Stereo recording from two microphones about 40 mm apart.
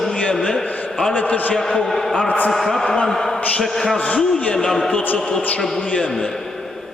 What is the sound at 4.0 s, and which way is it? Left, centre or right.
Speech, left.